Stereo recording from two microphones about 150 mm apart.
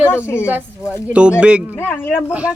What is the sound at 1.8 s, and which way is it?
Speech, 15° left (ahead or behind).